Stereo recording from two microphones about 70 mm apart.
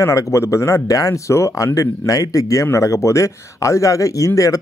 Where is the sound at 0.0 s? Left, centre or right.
Left.